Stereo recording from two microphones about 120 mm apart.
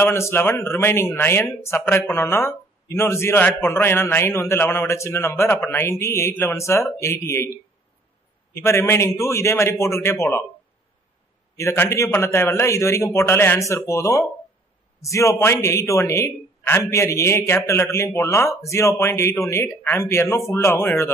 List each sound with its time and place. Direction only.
0.0 s speech: 20° left (ahead or behind)
8.5 s speech: 25° left (ahead or behind)
11.5 s speech: 20° left (ahead or behind)